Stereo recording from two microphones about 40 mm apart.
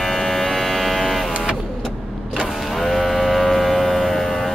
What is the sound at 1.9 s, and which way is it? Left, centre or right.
Power windows, centre.